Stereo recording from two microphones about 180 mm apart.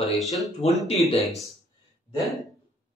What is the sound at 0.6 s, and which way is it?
Speech, 35° left (ahead or behind).